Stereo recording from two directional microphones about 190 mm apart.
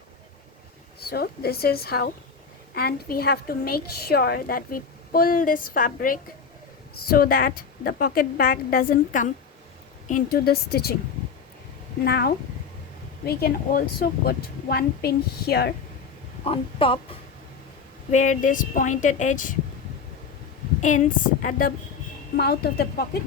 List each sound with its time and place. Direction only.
0.9 s a woman's voice: 55° left (ahead or behind)
12.0 s a woman's voice: 55° left (ahead or behind)
16.5 s speech: 30° left (ahead or behind)
18.1 s a woman's voice: 40° left (ahead or behind)
20.8 s a woman's voice: 40° left (ahead or behind)
22.4 s a woman's voice: 55° left (ahead or behind)